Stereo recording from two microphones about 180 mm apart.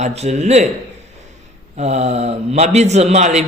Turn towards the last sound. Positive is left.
turn(degrees=-40)  # may be behind; listen again after turning